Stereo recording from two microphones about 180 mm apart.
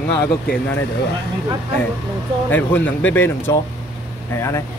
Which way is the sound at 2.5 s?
10° left (ahead or behind).